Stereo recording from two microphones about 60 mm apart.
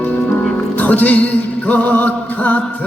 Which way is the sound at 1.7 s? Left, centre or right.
Left.